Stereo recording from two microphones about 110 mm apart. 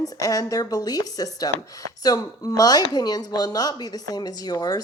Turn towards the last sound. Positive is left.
turn(degrees=35)  # may be behind; listen again after turning